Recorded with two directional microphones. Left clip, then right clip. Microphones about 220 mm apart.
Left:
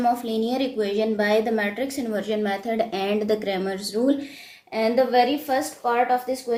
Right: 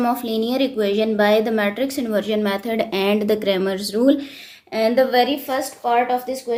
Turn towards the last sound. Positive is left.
turn(degrees=-40)  # may be behind; listen again after turning